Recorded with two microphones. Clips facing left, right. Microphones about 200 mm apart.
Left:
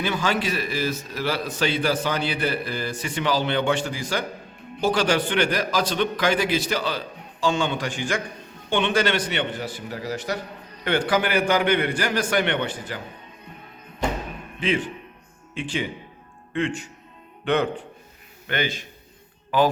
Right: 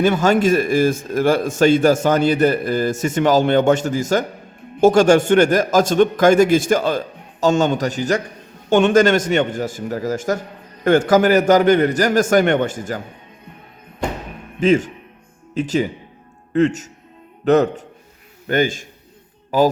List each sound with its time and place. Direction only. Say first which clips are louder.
0.0 s a man's voice: right 10 dB; 45° right (ahead or behind)
14.6 s a man's voice: right 9 dB; 45° right (ahead or behind)